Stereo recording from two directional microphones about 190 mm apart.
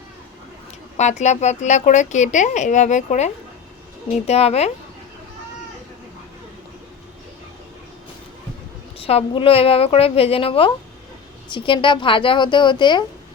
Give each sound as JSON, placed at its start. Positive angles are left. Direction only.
{"t": 0.9, "sound": "speech", "side_deg": 35}
{"t": 9.0, "sound": "a woman's voice", "side_deg": 30}